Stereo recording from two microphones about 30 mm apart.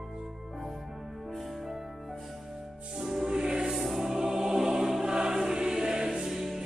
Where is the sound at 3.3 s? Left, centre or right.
Right.